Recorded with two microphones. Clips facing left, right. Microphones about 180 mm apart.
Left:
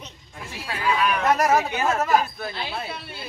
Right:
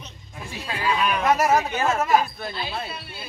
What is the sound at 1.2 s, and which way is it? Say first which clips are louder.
Speech: right 1 dB; 5° right (ahead or behind).